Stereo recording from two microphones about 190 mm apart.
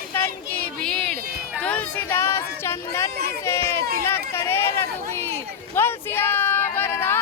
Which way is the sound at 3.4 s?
15° left (ahead or behind).